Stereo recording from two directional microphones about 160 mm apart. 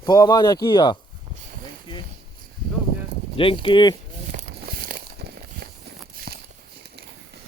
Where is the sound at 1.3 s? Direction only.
45° right (ahead or behind).